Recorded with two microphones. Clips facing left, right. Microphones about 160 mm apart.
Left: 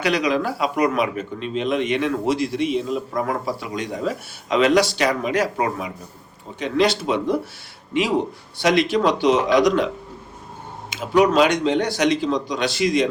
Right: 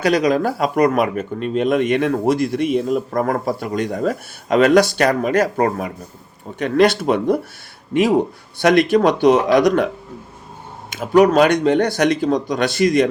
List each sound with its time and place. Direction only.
0.0 s speech: 45° right (ahead or behind)